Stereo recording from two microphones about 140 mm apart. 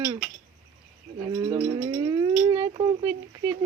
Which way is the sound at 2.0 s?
30° right (ahead or behind).